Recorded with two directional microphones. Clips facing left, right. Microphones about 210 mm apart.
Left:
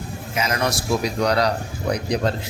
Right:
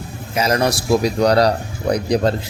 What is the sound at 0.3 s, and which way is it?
Speech, 35° right (ahead or behind).